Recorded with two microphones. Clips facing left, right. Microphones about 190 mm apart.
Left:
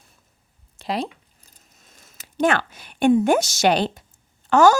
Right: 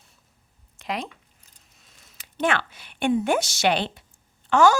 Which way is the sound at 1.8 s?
45° left (ahead or behind).